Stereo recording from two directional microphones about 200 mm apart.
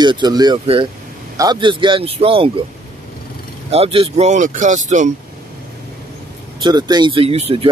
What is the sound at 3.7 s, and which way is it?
Speech, 30° right (ahead or behind).